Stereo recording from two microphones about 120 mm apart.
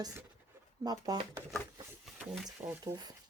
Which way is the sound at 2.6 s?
25° right (ahead or behind).